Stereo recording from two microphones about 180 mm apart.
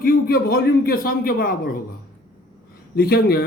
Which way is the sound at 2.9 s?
60° left (ahead or behind).